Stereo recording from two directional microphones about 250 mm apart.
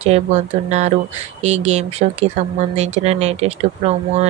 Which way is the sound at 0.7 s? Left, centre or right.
Right.